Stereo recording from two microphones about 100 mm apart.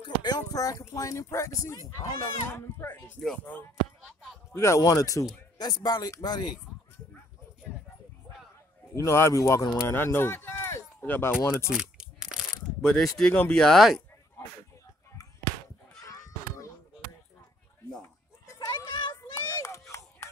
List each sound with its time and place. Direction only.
0.0 s speech: 45° left (ahead or behind); by 3.2 s 20° left (ahead or behind)
4.6 s speech: 30° left (ahead or behind)
5.6 s speech: 45° left (ahead or behind)
8.9 s speech: 25° left (ahead or behind)
11.7 s crumpling: 5° right (ahead or behind)
12.8 s speech: 10° left (ahead or behind)
18.5 s a sound: 30° left (ahead or behind)
18.9 s children playing: 50° left (ahead or behind)
19.6 s a sound: 30° left (ahead or behind)